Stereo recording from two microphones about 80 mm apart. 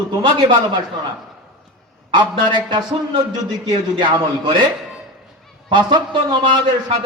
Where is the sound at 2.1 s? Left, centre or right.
Right.